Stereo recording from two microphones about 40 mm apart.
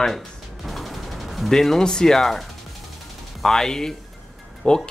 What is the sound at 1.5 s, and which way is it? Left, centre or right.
Speech, centre.